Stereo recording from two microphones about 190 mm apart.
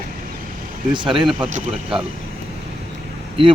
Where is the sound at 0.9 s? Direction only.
25° right (ahead or behind).